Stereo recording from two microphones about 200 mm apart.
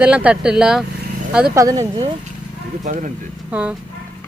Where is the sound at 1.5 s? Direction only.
15° right (ahead or behind).